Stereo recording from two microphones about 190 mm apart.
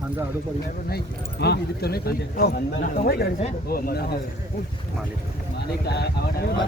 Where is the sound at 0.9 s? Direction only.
55° left (ahead or behind).